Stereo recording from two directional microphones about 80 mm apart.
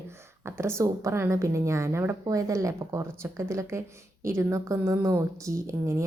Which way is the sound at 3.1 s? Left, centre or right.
Right.